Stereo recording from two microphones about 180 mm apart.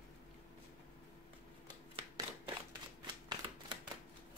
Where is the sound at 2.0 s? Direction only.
25° right (ahead or behind).